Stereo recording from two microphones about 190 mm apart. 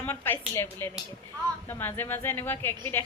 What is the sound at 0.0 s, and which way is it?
A woman's voice, 10° left (ahead or behind).